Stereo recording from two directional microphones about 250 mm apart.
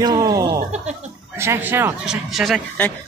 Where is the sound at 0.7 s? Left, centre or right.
Right.